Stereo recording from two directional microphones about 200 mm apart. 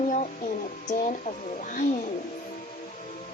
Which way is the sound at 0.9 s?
40° left (ahead or behind).